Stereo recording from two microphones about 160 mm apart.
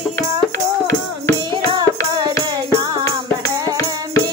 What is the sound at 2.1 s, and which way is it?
Music, 25° right (ahead or behind).